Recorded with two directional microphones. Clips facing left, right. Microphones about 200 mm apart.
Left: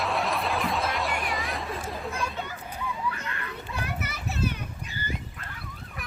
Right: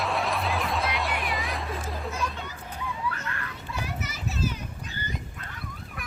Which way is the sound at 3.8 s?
60° left (ahead or behind).